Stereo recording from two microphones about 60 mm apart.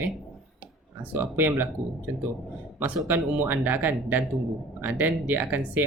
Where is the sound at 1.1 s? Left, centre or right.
Right.